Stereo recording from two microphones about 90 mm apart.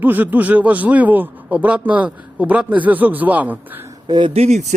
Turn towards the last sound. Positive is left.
turn(degrees=-60)  # may be behind; listen again after turning